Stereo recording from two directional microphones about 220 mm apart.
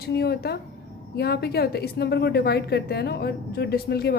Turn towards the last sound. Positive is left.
turn(degrees=45)  # may be behind; listen again after turning